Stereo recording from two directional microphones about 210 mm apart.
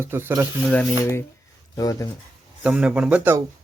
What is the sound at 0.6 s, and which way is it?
A man's voice, 5° left (ahead or behind).